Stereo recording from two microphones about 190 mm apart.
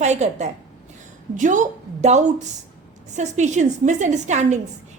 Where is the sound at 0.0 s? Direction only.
35° right (ahead or behind).